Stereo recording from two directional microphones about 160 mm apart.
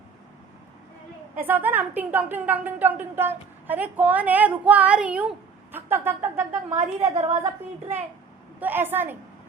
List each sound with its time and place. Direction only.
1.4 s a woman's voice: 10° right (ahead or behind)
6.7 s a woman's voice: 45° right (ahead or behind)
8.6 s a woman's voice: 10° right (ahead or behind)